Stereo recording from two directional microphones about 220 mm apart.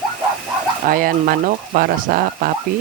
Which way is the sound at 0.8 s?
40° right (ahead or behind).